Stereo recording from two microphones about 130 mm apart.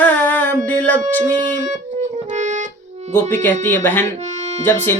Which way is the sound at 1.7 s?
65° right (ahead or behind).